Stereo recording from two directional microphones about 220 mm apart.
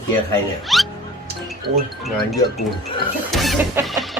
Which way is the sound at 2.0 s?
Centre (ahead or behind).